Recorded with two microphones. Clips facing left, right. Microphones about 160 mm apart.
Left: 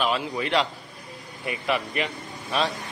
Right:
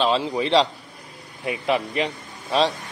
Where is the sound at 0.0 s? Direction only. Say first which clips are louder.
Right 5 dB; 25° right (ahead or behind).